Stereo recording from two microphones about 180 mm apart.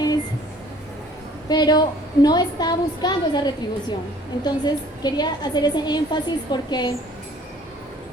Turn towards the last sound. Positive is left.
turn(degrees=25)  # may be behind; listen again after turning